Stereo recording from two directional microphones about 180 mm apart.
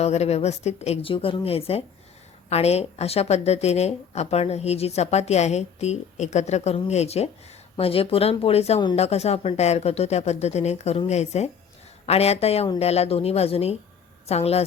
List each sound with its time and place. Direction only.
0.0 s a woman's voice: 35° left (ahead or behind)